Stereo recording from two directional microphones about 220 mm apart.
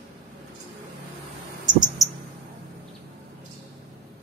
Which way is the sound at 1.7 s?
20° right (ahead or behind).